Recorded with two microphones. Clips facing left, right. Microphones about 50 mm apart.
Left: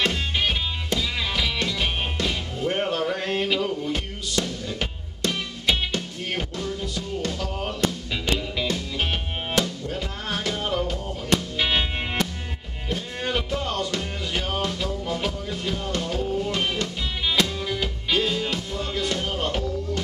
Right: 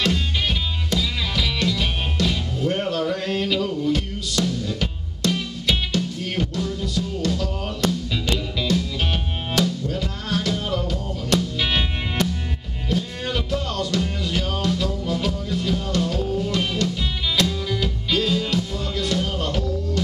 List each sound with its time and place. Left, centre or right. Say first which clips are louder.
0.0 s music: right 1 dB; centre